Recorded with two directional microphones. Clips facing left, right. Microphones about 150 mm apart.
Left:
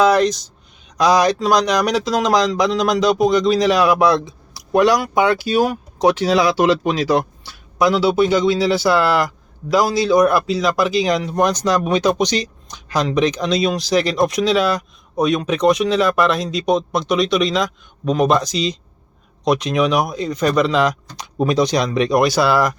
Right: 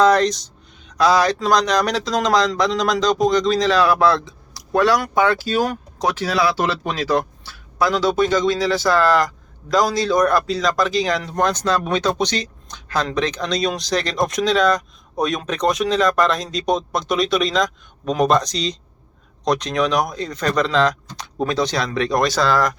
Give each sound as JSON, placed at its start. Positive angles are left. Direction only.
{"t": 0.0, "sound": "speech", "side_deg": 10}